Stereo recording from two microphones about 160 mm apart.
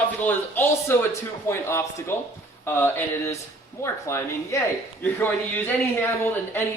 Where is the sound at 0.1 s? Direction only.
10° left (ahead or behind).